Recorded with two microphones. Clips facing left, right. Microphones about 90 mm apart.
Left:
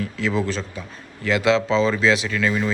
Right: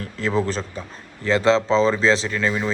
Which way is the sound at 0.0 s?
40° right (ahead or behind).